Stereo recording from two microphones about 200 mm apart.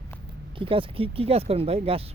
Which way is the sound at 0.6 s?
25° right (ahead or behind).